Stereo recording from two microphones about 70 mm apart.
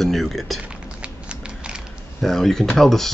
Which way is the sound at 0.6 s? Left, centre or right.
Centre.